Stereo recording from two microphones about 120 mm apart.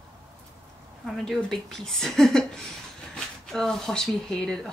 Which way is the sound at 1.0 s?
5° left (ahead or behind).